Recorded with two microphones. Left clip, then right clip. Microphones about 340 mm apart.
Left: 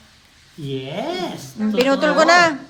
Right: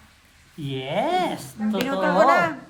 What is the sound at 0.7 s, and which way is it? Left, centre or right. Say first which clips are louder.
Speech: right 2 dB; centre.